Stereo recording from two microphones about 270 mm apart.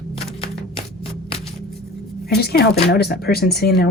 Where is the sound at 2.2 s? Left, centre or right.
Left.